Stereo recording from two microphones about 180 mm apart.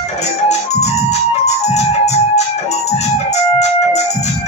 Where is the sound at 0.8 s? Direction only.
40° left (ahead or behind).